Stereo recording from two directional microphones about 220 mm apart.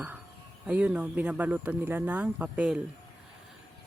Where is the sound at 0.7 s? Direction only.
5° right (ahead or behind).